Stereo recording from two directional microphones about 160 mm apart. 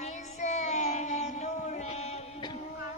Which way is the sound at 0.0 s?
45° left (ahead or behind).